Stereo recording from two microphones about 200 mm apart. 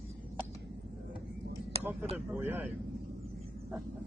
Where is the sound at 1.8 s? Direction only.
10° right (ahead or behind).